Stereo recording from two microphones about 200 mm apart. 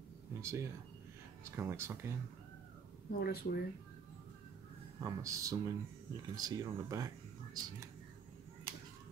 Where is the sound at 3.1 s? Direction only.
50° left (ahead or behind).